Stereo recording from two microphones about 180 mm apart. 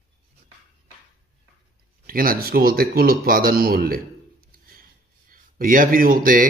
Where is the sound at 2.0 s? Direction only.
50° right (ahead or behind).